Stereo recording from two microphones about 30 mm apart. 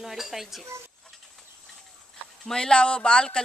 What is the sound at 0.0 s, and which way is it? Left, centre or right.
Speech, centre.